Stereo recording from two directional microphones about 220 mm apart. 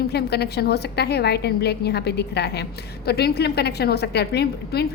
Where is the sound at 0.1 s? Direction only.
45° left (ahead or behind).